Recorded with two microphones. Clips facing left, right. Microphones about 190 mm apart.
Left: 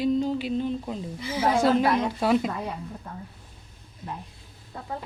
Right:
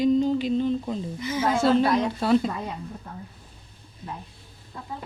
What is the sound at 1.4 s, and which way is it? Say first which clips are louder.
Speech: even; 10° left (ahead or behind).